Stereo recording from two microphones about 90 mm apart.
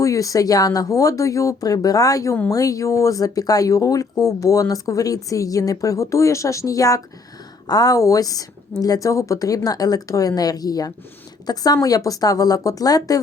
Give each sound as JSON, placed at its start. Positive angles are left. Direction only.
{"t": 0.0, "sound": "a woman's voice", "side_deg": 40}